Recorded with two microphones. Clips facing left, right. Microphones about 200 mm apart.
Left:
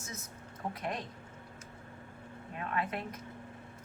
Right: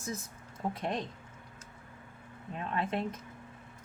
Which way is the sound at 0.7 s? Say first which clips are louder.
Right 3 dB; 25° right (ahead or behind).